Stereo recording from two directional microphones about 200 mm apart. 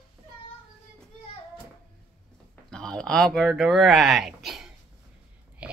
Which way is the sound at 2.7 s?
5° left (ahead or behind).